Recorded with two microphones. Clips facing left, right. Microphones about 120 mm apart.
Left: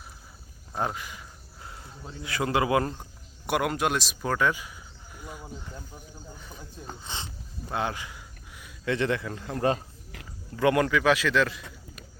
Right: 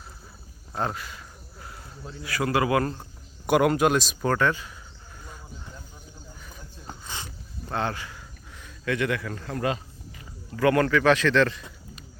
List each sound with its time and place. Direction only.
0.8 s speech: 15° left (ahead or behind)
2.9 s speech: 5° left (ahead or behind)
7.0 s a sound: 25° left (ahead or behind)
7.7 s speech: 15° left (ahead or behind)
8.8 s a man's voice: 25° left (ahead or behind)
9.6 s speech: 35° left (ahead or behind)
10.6 s speech: 15° left (ahead or behind)